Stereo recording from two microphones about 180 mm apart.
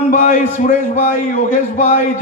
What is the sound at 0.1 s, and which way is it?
A man's voice, 45° left (ahead or behind).